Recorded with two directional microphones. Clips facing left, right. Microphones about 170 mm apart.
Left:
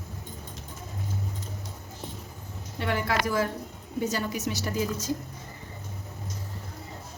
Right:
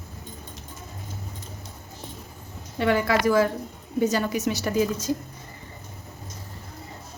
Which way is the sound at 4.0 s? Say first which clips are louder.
Right 6 dB; 75° right (ahead or behind).